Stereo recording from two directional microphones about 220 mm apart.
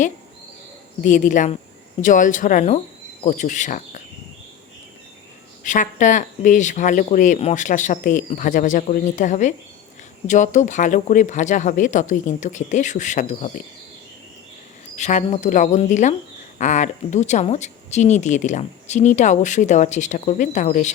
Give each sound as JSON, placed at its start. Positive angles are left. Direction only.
{"t": 1.0, "sound": "speech", "side_deg": 35}
{"t": 5.6, "sound": "speech", "side_deg": 35}
{"t": 14.9, "sound": "speech", "side_deg": 30}